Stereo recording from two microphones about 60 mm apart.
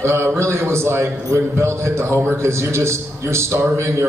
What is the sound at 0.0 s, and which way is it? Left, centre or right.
A man's voice, right.